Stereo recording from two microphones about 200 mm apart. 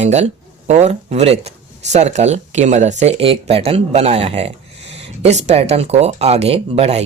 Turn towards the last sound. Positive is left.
turn(degrees=-30)  # may be behind; listen again after turning